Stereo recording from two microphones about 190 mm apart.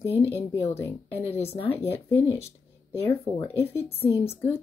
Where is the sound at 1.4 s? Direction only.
30° left (ahead or behind).